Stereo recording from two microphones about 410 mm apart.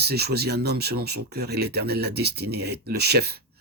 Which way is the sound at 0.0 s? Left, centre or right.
Right.